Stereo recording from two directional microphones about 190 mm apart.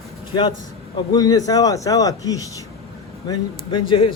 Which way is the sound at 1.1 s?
20° left (ahead or behind).